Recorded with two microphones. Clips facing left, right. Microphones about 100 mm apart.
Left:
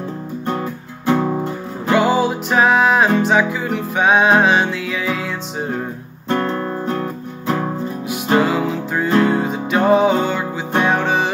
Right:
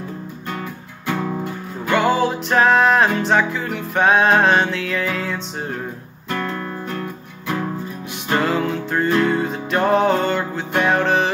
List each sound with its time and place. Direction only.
1.0 s music: 30° left (ahead or behind)
2.0 s music: 5° left (ahead or behind)
6.2 s music: 30° left (ahead or behind)
8.1 s music: 5° left (ahead or behind)